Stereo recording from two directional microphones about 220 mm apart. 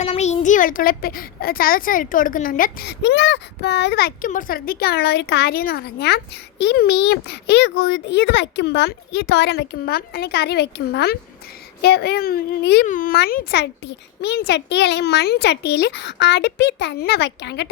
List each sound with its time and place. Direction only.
0.0 s a child's voice: 30° left (ahead or behind); by 17.7 s 50° left (ahead or behind)